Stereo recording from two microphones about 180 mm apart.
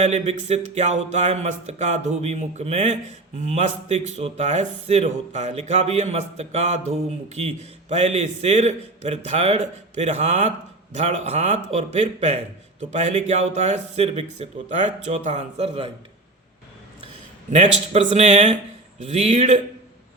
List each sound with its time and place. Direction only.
0.0 s a man's voice: 40° right (ahead or behind)
17.5 s a man's voice: 40° right (ahead or behind)